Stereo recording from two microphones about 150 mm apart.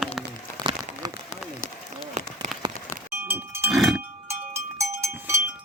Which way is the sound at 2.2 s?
50° right (ahead or behind).